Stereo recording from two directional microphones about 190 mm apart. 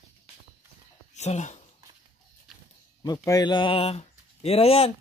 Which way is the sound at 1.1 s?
35° left (ahead or behind).